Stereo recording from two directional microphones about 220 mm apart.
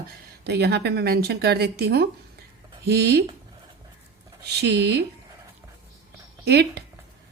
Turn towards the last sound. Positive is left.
turn(degrees=-50)  # may be behind; listen again after turning